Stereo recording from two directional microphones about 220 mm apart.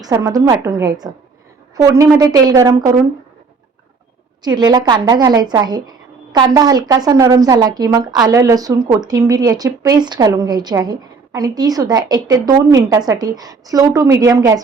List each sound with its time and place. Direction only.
0.0 s a woman's voice: 15° right (ahead or behind)
4.4 s a woman's voice: 20° right (ahead or behind)